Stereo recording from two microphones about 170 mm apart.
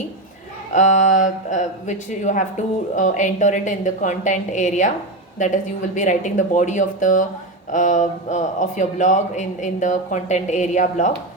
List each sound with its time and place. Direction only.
0.7 s a man's voice: 45° left (ahead or behind)